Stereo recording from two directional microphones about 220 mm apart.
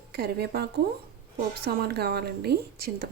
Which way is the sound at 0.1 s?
45° right (ahead or behind).